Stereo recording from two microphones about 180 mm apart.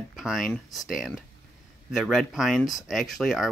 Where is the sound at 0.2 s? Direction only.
Centre (ahead or behind).